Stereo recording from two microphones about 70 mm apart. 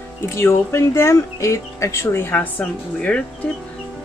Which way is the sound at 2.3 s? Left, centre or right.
Left.